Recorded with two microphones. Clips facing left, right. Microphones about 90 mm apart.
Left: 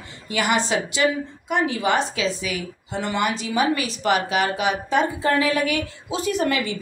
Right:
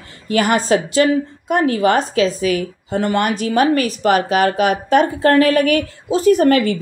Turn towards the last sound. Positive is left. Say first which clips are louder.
# right 10 dB
turn(degrees=-50)  # may be behind; listen again after turning